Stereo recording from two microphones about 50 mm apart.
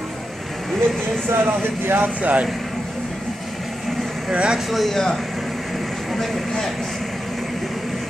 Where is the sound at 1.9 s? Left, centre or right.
Right.